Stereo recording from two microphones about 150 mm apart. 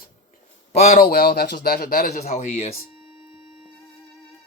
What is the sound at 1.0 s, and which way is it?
Speech, 90° left.